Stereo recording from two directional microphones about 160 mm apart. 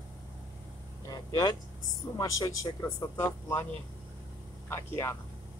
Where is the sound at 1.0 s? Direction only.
25° left (ahead or behind).